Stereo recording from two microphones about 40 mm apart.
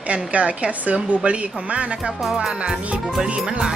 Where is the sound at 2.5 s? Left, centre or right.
Right.